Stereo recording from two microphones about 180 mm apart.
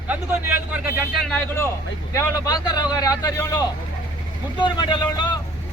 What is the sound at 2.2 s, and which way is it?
A man's voice, 20° left (ahead or behind).